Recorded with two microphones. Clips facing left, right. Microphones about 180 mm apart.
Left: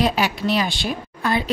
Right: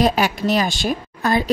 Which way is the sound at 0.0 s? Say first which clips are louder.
Right 3 dB; 45° right (ahead or behind).